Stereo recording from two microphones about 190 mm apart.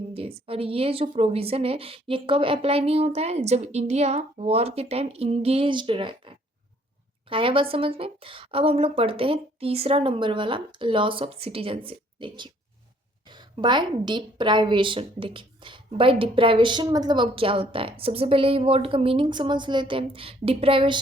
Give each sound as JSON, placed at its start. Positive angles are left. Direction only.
{"t": 0.1, "sound": "a woman's voice", "side_deg": -30}